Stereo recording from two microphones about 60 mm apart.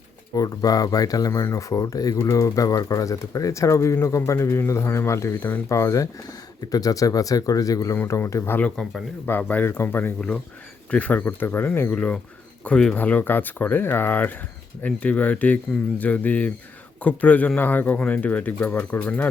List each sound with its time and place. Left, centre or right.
0.3 s speech: left
1.5 s speech: left
2.2 s speech: left
5.6 s speech: left
6.7 s speech: left
8.0 s speech: left
8.6 s speech: centre
9.3 s speech: left
10.2 s speech: centre
10.9 s speech: left
12.6 s speech: centre
13.0 s speech: left